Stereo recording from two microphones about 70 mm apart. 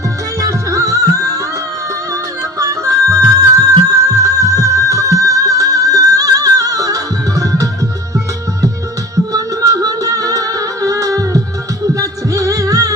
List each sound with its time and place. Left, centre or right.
0.3 s music: right
2.6 s music: right
9.1 s music: right